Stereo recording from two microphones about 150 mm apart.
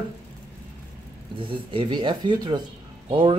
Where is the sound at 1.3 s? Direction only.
35° right (ahead or behind).